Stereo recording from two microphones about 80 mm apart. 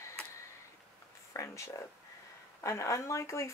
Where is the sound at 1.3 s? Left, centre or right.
Left.